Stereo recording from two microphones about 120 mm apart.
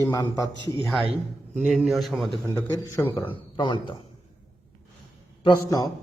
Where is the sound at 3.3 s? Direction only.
40° left (ahead or behind).